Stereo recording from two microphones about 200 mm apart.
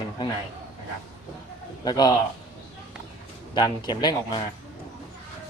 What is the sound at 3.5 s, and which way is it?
Speech, 20° left (ahead or behind).